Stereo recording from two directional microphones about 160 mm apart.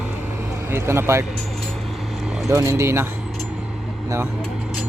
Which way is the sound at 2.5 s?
15° right (ahead or behind).